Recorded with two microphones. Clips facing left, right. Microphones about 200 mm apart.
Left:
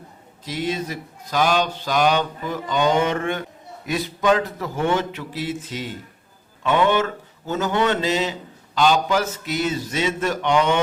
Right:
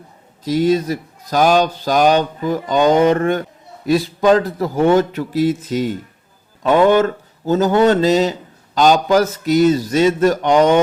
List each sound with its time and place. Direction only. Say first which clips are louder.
0.4 s speech: right 10 dB; 40° right (ahead or behind)